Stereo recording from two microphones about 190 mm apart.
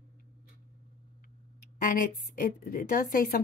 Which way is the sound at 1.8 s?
50° left (ahead or behind).